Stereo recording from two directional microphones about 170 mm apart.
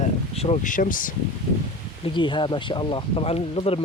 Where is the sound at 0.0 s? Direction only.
35° left (ahead or behind); by 1.1 s 55° left (ahead or behind).